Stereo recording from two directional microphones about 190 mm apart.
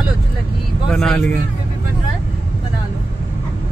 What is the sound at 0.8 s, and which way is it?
Speech, centre (ahead or behind).